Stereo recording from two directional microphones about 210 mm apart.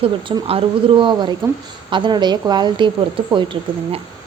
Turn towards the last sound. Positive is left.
turn(degrees=-25)  # may be behind; listen again after turning